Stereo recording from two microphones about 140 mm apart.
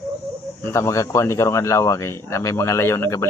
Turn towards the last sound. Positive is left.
turn(degrees=20)  # may be behind; listen again after turning